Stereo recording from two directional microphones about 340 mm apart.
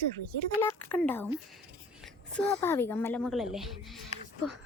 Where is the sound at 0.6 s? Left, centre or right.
Centre.